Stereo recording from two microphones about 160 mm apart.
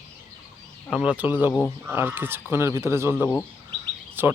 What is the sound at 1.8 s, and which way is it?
Speech, 15° right (ahead or behind).